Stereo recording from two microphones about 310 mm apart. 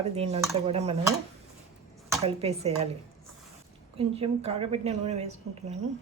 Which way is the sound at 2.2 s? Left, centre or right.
Centre.